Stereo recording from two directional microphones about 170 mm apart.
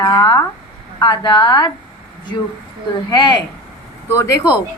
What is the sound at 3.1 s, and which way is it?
A woman's voice, 25° left (ahead or behind).